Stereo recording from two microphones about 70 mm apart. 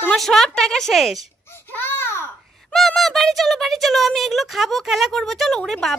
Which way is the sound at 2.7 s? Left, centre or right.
Centre.